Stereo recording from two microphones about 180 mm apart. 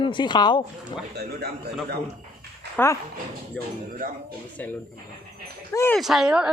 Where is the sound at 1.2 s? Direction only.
60° right (ahead or behind).